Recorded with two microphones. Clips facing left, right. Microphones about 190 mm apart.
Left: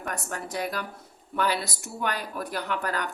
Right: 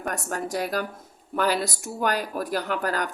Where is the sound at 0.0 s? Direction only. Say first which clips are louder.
Right 4 dB; 45° right (ahead or behind).